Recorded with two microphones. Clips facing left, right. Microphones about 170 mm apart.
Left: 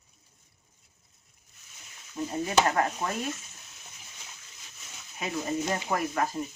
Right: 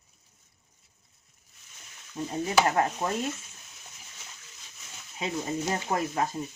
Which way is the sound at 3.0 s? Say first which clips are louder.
Right 2 dB; 20° right (ahead or behind).